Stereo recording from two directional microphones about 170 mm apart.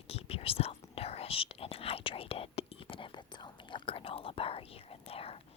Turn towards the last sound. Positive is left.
turn(degrees=35)  # may be behind; listen again after turning